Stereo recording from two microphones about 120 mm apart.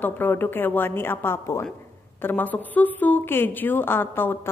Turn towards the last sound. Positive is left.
turn(degrees=20)  # may be behind; listen again after turning